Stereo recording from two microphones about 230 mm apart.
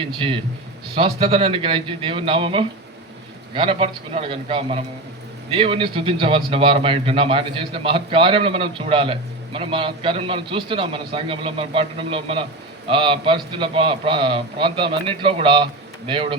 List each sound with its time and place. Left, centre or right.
0.0 s a man's voice: right